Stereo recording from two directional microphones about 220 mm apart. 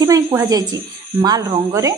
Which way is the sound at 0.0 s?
15° right (ahead or behind).